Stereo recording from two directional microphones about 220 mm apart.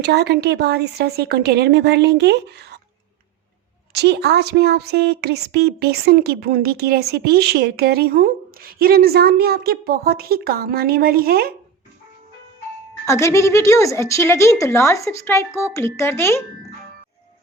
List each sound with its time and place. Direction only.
0.0 s a woman's voice: 50° right (ahead or behind)
3.9 s a woman's voice: 50° right (ahead or behind)
13.1 s speech: 15° left (ahead or behind)